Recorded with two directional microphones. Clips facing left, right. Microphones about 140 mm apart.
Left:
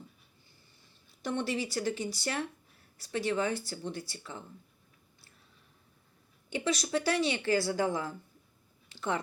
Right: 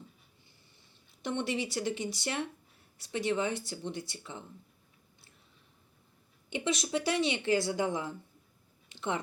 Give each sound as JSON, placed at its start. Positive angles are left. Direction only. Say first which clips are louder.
{"t": 1.2, "sound": "speech", "louder": "even", "side_deg": -20}
{"t": 6.5, "sound": "speech", "louder": "left 1 dB", "side_deg": -20}